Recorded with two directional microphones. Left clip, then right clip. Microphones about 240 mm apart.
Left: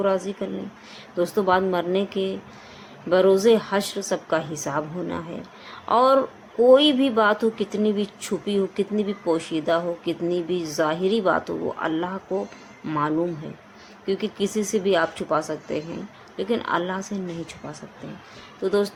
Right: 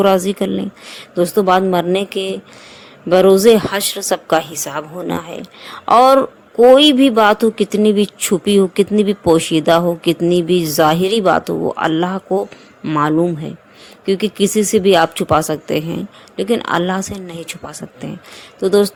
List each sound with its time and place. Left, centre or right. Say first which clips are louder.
0.0 s a woman's voice: right 10 dB; right